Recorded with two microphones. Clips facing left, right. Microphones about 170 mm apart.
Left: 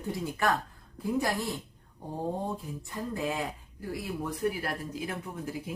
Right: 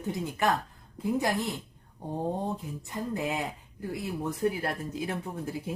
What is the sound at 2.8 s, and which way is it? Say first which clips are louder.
Speech: right 1 dB; 20° right (ahead or behind).